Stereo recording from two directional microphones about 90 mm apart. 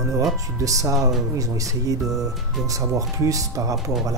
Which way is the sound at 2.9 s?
40° right (ahead or behind).